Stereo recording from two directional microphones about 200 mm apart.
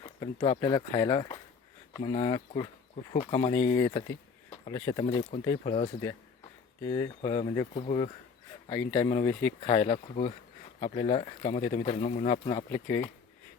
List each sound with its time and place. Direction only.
0.0 s speech: 20° left (ahead or behind)
7.2 s speech: 25° left (ahead or behind)
8.7 s speech: 15° left (ahead or behind)